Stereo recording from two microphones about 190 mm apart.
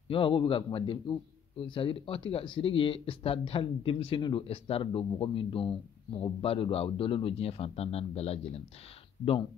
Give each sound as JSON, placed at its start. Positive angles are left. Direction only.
{"t": 0.1, "sound": "a man's voice", "side_deg": 25}